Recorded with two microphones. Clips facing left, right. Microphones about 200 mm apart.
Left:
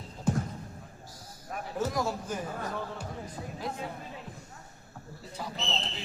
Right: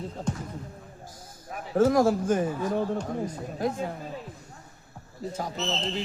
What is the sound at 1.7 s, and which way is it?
Speech, 55° right (ahead or behind).